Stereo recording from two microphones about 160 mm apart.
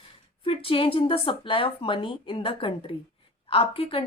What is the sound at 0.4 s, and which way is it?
A woman's voice, 35° left (ahead or behind).